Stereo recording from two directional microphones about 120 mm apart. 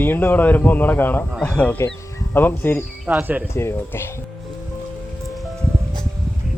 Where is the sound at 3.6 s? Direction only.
20° left (ahead or behind).